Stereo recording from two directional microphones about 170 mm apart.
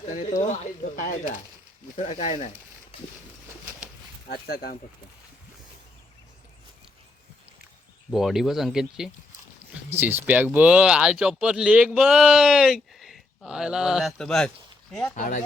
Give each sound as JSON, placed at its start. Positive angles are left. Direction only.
{"t": 0.2, "sound": "speech", "side_deg": 45}
{"t": 4.3, "sound": "speech", "side_deg": 65}
{"t": 8.1, "sound": "speech", "side_deg": 0}
{"t": 15.1, "sound": "speech", "side_deg": 50}